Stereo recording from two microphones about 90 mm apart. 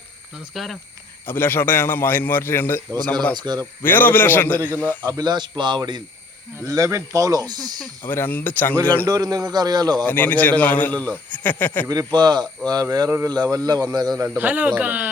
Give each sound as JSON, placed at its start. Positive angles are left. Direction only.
{"t": 0.5, "sound": "speech", "side_deg": 0}
{"t": 1.3, "sound": "a man's voice", "side_deg": 25}
{"t": 3.3, "sound": "speech", "side_deg": -50}
{"t": 3.8, "sound": "a man's voice", "side_deg": 20}
{"t": 5.1, "sound": "speech", "side_deg": -50}
{"t": 6.6, "sound": "speech", "side_deg": -35}
{"t": 8.0, "sound": "a man's voice", "side_deg": 20}
{"t": 9.0, "sound": "speech", "side_deg": -45}
{"t": 10.1, "sound": "a man's voice", "side_deg": 20}
{"t": 11.9, "sound": "speech", "side_deg": -50}
{"t": 14.3, "sound": "speech", "side_deg": -20}